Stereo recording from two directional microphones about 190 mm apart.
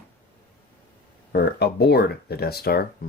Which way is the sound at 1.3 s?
55° left (ahead or behind).